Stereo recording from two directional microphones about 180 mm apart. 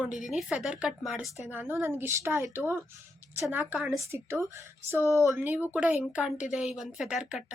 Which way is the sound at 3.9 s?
15° right (ahead or behind).